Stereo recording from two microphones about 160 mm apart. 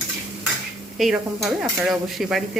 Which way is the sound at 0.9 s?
Centre (ahead or behind).